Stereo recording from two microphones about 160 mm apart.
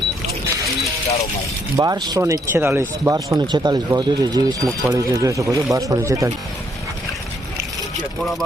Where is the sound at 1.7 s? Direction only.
25° right (ahead or behind).